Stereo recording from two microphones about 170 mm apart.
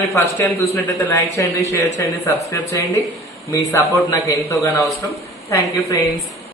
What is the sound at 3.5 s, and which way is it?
A man's voice, 20° left (ahead or behind).